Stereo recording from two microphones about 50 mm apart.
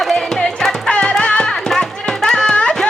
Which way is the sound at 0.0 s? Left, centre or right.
Centre.